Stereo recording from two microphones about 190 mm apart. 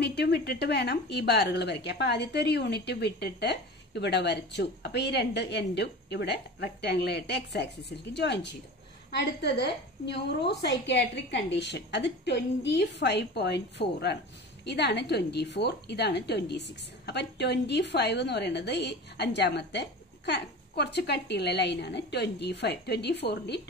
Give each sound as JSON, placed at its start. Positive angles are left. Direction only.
{"t": 0.0, "sound": "a woman's voice", "side_deg": 60}